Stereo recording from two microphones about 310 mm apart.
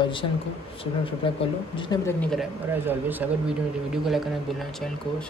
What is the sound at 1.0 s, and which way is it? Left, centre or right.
Speech, centre.